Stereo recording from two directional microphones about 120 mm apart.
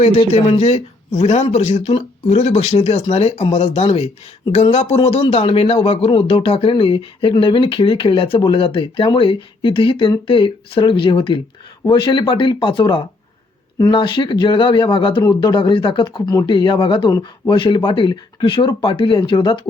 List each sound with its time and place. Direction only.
0.0 s speech: 60° left (ahead or behind)
4.9 s speech: 50° left (ahead or behind)